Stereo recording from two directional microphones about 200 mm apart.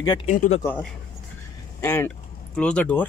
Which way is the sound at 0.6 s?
10° left (ahead or behind).